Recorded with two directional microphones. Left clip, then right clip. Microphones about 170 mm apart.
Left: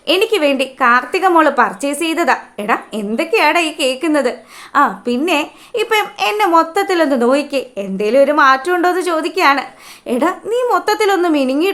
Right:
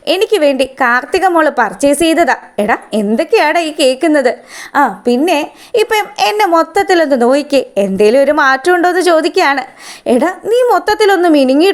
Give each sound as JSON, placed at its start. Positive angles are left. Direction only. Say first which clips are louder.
{"t": 0.0, "sound": "a woman's voice", "louder": "right 3 dB", "side_deg": -40}